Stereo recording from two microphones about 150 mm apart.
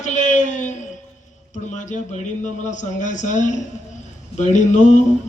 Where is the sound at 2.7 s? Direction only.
55° left (ahead or behind).